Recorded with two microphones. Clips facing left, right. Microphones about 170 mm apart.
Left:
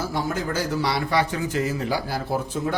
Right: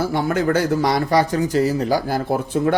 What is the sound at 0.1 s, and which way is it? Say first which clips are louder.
A man's voice: right 7 dB; 60° right (ahead or behind).